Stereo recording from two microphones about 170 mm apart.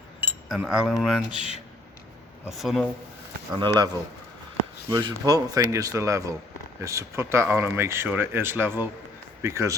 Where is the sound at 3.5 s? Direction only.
25° right (ahead or behind).